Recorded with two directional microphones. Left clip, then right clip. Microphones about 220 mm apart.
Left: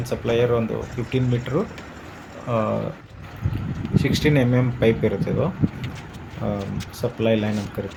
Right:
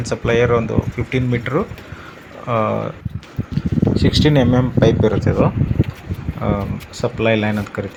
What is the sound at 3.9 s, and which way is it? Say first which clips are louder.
Speech: right 4 dB; 15° right (ahead or behind).